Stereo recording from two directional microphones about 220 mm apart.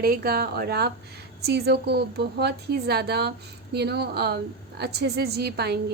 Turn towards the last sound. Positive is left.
turn(degrees=-45)  # may be behind; listen again after turning